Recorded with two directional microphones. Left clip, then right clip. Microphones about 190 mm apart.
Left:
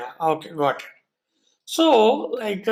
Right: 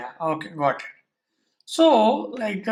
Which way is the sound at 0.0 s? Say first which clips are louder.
Left 4 dB; 30° left (ahead or behind).